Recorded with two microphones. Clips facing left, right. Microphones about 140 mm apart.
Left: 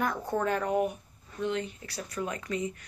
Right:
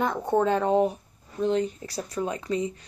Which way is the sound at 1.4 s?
35° right (ahead or behind).